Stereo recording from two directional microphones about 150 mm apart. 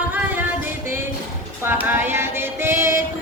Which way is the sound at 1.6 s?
15° right (ahead or behind).